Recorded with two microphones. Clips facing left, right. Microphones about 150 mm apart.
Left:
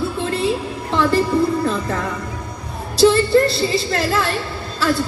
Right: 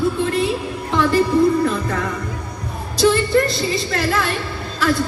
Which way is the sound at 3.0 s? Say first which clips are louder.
Left 3 dB; 30° left (ahead or behind).